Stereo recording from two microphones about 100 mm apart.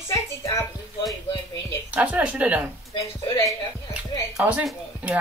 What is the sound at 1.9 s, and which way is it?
Speech, 15° right (ahead or behind).